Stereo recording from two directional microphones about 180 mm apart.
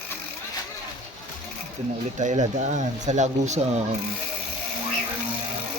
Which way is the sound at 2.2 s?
40° right (ahead or behind).